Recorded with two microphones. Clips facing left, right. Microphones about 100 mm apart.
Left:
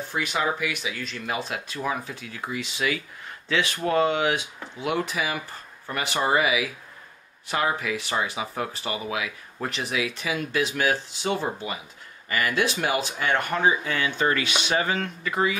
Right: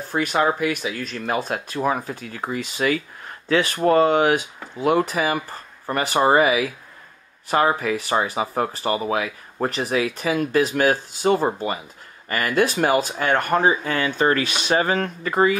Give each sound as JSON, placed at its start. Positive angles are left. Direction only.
{"t": 0.1, "sound": "speech", "side_deg": -45}